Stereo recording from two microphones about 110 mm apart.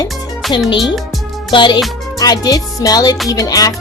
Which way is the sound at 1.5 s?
45° left (ahead or behind).